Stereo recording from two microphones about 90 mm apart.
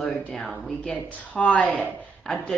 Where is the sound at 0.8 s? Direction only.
10° left (ahead or behind).